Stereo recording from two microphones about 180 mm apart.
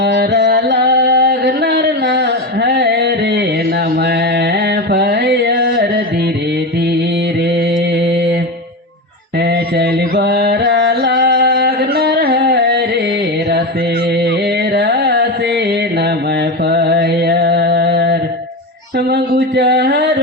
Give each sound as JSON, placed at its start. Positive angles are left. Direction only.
{"t": 0.0, "sound": "music", "side_deg": -70}
{"t": 4.0, "sound": "mantra", "side_deg": -65}
{"t": 9.4, "sound": "mantra", "side_deg": -65}
{"t": 14.2, "sound": "carnatic music", "side_deg": -65}
{"t": 16.6, "sound": "mantra", "side_deg": -65}
{"t": 18.9, "sound": "a sound", "side_deg": -60}